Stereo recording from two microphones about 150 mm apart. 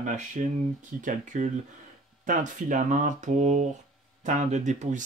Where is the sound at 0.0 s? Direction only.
60° right (ahead or behind).